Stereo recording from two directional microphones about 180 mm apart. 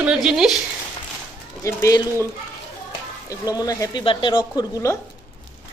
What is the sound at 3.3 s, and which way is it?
Speech, 20° left (ahead or behind).